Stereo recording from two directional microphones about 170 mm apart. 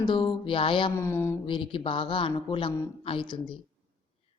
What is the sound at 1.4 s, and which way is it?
A woman's voice, 30° left (ahead or behind).